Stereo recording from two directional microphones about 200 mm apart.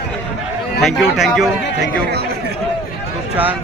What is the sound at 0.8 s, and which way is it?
A man's voice, centre (ahead or behind).